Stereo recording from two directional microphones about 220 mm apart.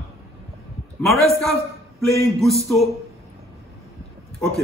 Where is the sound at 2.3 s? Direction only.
Centre (ahead or behind).